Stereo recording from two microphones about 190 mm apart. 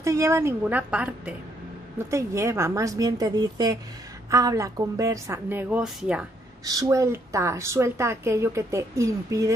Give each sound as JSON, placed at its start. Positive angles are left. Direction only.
{"t": 0.0, "sound": "a woman's voice", "side_deg": -15}
{"t": 6.6, "sound": "a woman's voice", "side_deg": -20}